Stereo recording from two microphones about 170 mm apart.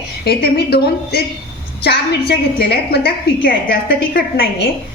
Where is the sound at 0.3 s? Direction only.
70° left (ahead or behind).